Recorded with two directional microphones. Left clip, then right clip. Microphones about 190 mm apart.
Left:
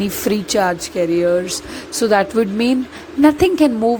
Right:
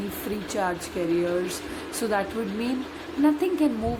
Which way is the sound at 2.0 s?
45° left (ahead or behind).